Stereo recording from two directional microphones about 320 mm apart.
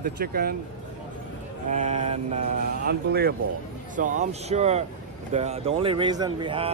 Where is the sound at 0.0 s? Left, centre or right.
Right.